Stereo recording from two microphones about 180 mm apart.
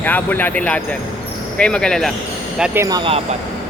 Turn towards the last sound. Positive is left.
turn(degrees=-25)  # may be behind; listen again after turning